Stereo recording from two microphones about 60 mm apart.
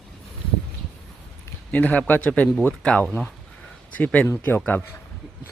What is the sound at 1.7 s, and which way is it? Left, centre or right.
Speech, left.